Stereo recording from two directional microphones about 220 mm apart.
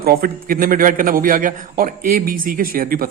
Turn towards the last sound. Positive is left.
turn(degrees=-40)  # may be behind; listen again after turning